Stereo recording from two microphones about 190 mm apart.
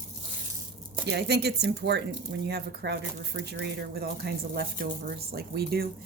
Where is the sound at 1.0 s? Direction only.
60° right (ahead or behind).